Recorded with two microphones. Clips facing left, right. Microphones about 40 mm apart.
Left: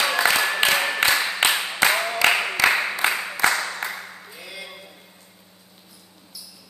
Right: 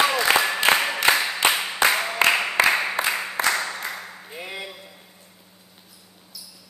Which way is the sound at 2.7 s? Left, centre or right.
Centre.